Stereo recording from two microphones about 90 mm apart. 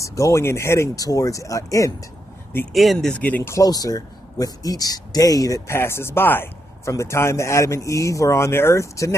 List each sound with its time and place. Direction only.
0.0 s speech: 35° left (ahead or behind)
2.7 s speech: centre (ahead or behind)
3.2 s speech: 20° left (ahead or behind)
3.5 s speech: 45° left (ahead or behind)
5.7 s speech: 25° left (ahead or behind)